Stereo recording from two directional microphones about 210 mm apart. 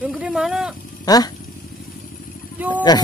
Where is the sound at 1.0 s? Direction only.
15° left (ahead or behind).